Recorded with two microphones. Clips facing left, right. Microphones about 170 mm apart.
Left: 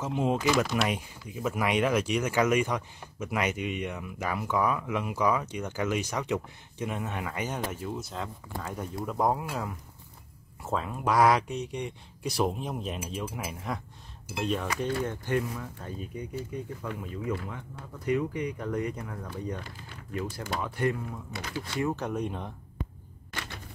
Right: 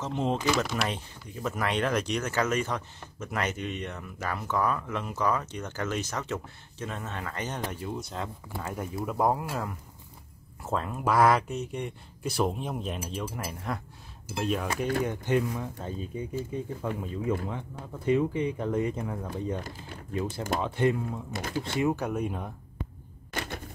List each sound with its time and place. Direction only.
0.0 s speech: 10° left (ahead or behind)
15.0 s speech: 20° right (ahead or behind)
21.4 s speech: 50° right (ahead or behind)
21.7 s speech: 15° right (ahead or behind)
23.3 s a sound: 50° right (ahead or behind)